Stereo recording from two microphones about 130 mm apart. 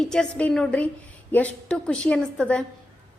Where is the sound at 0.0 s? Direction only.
5° left (ahead or behind).